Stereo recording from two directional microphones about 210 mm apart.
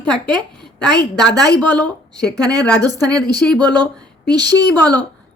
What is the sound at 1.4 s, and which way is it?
A woman's voice, 15° right (ahead or behind).